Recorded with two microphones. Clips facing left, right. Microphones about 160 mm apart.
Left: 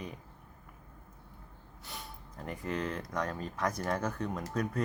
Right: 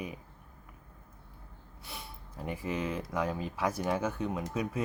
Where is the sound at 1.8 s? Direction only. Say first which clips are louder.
Even; 5° right (ahead or behind).